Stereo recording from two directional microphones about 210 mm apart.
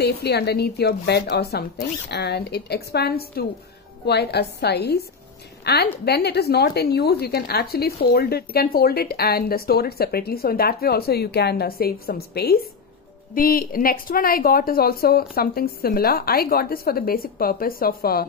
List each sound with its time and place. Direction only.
0.0 s a woman's voice: 50° left (ahead or behind)